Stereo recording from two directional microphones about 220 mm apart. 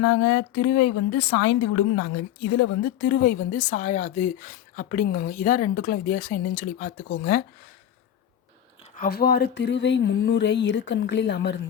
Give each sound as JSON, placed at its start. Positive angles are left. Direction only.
{"t": 0.0, "sound": "a woman's voice", "side_deg": 60}
{"t": 9.0, "sound": "speech", "side_deg": 45}